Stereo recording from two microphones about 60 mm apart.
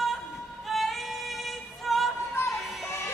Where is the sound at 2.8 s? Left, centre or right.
Left.